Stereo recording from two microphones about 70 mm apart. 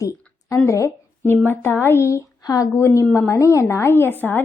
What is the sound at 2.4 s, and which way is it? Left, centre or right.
Speech, left.